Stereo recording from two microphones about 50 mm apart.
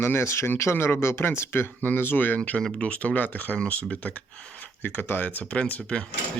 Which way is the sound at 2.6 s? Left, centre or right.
Centre.